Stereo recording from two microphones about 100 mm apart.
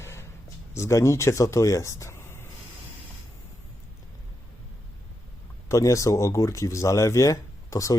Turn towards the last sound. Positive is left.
turn(degrees=30)  # may be behind; listen again after turning